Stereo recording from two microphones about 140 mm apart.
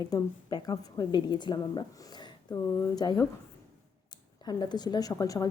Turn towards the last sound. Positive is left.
turn(degrees=25)  # may be behind; listen again after turning